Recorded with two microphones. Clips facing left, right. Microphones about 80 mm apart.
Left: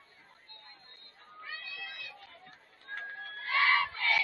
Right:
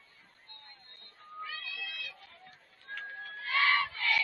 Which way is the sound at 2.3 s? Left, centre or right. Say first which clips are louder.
Left 1 dB; left.